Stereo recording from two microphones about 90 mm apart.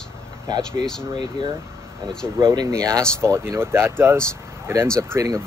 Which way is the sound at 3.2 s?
30° right (ahead or behind).